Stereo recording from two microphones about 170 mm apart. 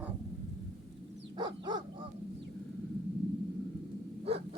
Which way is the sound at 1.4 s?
25° right (ahead or behind).